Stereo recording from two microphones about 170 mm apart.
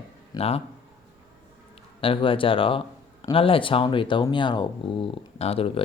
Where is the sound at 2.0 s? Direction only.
30° left (ahead or behind).